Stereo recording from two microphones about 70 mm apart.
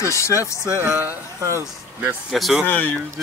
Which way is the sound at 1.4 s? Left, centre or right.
Right.